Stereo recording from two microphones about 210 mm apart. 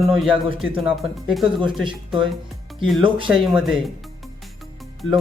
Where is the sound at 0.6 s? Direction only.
Centre (ahead or behind).